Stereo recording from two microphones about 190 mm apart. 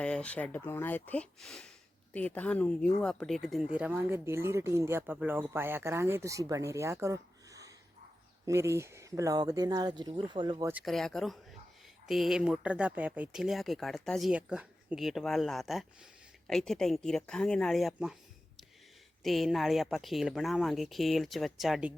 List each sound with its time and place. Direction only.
0.0 s speech: 5° left (ahead or behind); by 10.7 s 25° right (ahead or behind)
10.7 s speech: 5° right (ahead or behind)